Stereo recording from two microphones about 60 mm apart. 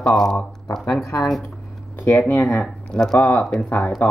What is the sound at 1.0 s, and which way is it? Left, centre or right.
Speech, left.